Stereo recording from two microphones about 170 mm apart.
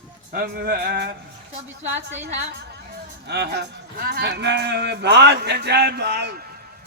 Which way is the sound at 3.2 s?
75° right (ahead or behind).